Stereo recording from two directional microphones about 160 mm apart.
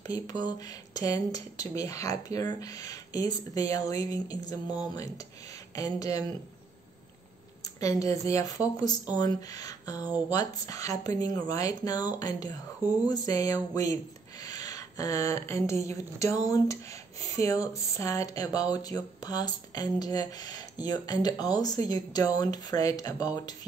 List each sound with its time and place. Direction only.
0.0 s speech: 25° left (ahead or behind)
7.6 s speech: 20° left (ahead or behind)
15.7 s a woman's voice: 45° right (ahead or behind)
16.4 s speech: 20° left (ahead or behind)